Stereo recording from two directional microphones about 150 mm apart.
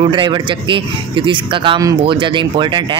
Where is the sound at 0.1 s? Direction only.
30° right (ahead or behind).